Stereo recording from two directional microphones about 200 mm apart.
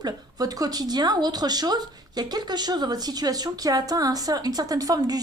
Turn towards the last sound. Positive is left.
turn(degrees=-20)  # may be behind; listen again after turning